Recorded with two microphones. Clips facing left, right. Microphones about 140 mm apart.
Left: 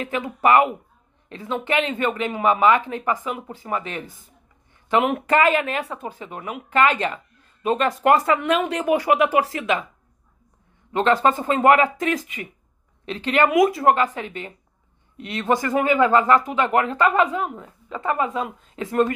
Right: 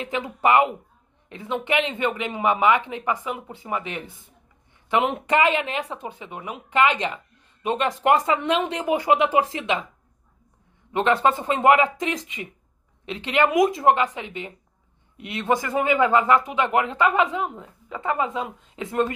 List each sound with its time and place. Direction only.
0.0 s speech: 20° right (ahead or behind)
5.0 s speech: 20° right (ahead or behind)
10.9 s speech: 20° right (ahead or behind)